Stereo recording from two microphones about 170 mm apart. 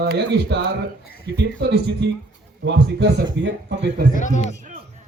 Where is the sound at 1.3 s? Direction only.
85° right.